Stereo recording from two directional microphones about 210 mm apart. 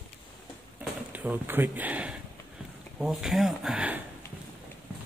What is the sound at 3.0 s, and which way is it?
Speech, centre (ahead or behind).